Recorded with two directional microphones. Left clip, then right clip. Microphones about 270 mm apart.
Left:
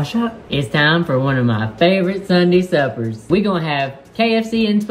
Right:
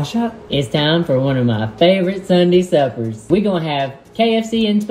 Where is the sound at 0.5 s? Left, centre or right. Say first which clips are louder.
Left 1 dB; left.